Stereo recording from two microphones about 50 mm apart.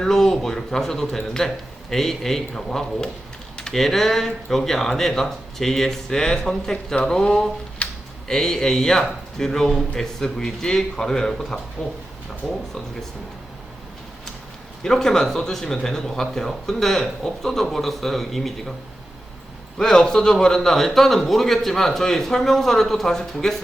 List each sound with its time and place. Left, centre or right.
0.0 s a man's voice: centre
7.8 s a sound: left
8.3 s a man's voice: centre
14.8 s a man's voice: centre
19.8 s a man's voice: centre